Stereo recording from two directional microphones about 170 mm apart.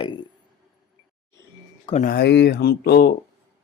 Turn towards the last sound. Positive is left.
turn(degrees=65)  # may be behind; listen again after turning